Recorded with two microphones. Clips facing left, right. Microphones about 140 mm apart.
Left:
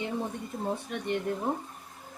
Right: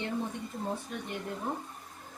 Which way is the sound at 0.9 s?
80° left.